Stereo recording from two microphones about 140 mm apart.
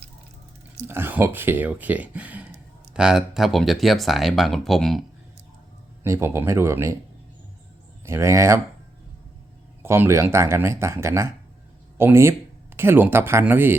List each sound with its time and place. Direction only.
0.9 s speech: 15° right (ahead or behind); by 5.0 s centre (ahead or behind)
6.0 s speech: 20° right (ahead or behind)
8.0 s speech: 20° right (ahead or behind)
9.8 s speech: 15° right (ahead or behind)